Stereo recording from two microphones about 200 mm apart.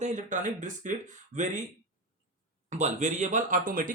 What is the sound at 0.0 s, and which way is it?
Speech, 40° right (ahead or behind).